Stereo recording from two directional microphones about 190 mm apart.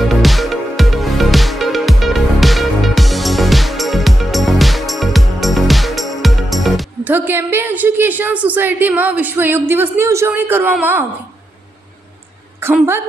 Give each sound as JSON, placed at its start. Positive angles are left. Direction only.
{"t": 0.1, "sound": "music", "side_deg": 0}
{"t": 7.1, "sound": "a woman's voice", "side_deg": -10}
{"t": 12.5, "sound": "a woman's voice", "side_deg": -10}